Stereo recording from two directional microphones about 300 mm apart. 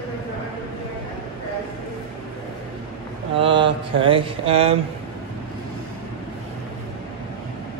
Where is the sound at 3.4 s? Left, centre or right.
Centre.